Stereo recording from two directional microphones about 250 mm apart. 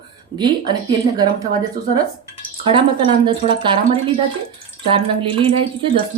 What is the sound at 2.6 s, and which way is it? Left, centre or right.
Speech, right.